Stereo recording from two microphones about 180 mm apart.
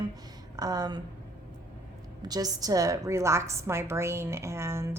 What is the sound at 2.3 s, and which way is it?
A woman's voice, 20° right (ahead or behind).